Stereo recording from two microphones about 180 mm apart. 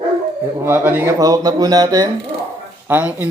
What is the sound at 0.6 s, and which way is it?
Speech, 15° right (ahead or behind).